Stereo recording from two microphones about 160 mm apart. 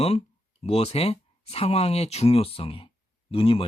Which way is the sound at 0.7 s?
40° left (ahead or behind).